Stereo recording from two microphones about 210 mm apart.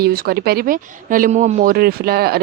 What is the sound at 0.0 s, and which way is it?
Speech, 45° right (ahead or behind).